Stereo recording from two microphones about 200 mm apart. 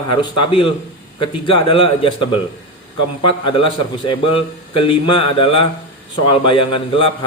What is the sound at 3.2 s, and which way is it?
A man's voice, 25° left (ahead or behind).